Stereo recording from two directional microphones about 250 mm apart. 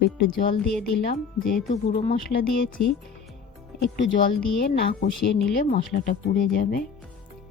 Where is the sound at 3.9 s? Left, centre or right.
Left.